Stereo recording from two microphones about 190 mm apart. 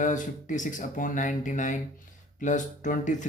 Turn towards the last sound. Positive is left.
turn(degrees=40)  # may be behind; listen again after turning